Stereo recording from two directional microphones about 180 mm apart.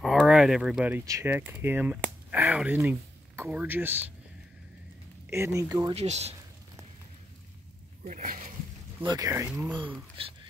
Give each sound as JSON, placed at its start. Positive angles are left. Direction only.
{"t": 0.0, "sound": "speech", "side_deg": 0}
{"t": 5.3, "sound": "speech", "side_deg": -15}
{"t": 5.9, "sound": "speech", "side_deg": -35}
{"t": 8.0, "sound": "speech", "side_deg": -50}
{"t": 9.0, "sound": "speech", "side_deg": -20}
{"t": 10.2, "sound": "speech", "side_deg": -30}